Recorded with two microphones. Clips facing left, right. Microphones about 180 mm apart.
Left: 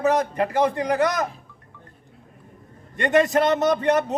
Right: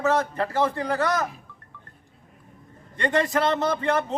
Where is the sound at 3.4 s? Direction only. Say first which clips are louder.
Left 4 dB; 20° left (ahead or behind).